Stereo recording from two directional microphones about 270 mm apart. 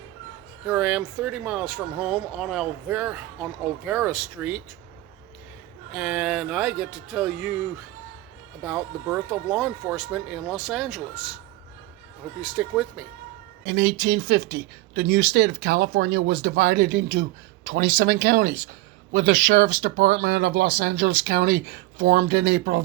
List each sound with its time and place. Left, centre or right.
0.7 s speech: centre
5.9 s speech: centre
8.6 s speech: centre
12.4 s speech: centre
13.7 s speech: right